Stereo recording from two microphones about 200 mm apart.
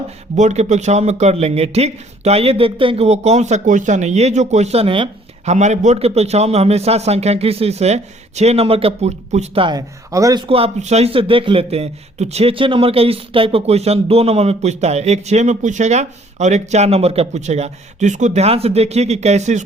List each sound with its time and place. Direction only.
0.3 s a man's voice: 35° right (ahead or behind)